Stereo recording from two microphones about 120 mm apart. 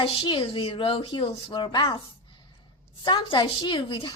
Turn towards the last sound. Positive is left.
turn(degrees=40)  # may be behind; listen again after turning